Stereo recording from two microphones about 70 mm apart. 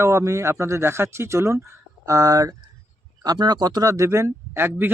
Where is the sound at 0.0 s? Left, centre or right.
Right.